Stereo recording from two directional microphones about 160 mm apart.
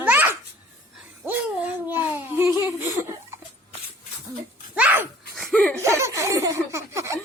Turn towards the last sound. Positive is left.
turn(degrees=-20)  # may be behind; listen again after turning